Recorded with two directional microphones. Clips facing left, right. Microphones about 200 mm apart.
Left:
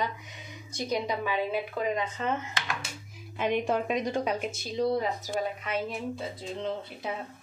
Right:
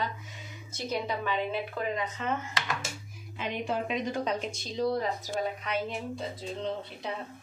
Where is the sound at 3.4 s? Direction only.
50° left (ahead or behind).